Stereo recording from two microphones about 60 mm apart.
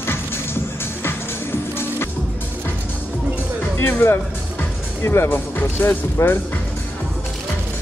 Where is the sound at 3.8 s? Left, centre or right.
Left.